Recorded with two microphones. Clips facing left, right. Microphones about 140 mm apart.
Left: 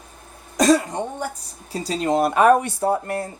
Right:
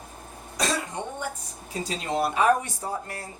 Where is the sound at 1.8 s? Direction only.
45° left (ahead or behind); by 3.2 s 60° left (ahead or behind).